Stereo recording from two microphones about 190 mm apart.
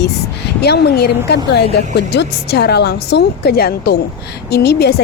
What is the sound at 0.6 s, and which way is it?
Speech, 60° left (ahead or behind).